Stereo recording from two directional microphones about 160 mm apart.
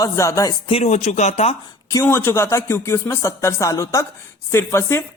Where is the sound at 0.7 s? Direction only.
40° left (ahead or behind).